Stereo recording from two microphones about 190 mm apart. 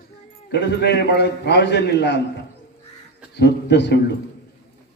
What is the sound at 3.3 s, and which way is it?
Speech, 60° left (ahead or behind).